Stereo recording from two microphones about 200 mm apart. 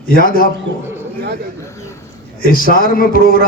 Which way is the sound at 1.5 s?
15° left (ahead or behind).